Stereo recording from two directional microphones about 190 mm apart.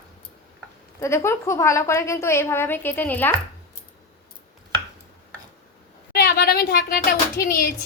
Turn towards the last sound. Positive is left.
turn(degrees=50)  # may be behind; listen again after turning